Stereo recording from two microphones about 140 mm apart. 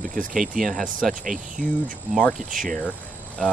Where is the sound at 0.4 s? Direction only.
Centre (ahead or behind).